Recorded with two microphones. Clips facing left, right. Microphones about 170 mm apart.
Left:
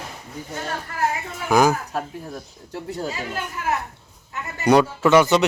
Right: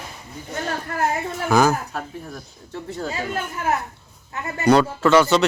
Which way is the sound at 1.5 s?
15° left (ahead or behind).